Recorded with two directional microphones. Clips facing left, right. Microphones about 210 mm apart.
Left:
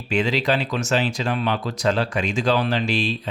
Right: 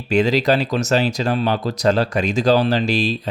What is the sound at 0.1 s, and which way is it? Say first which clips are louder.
Speech: right 5 dB; 40° right (ahead or behind).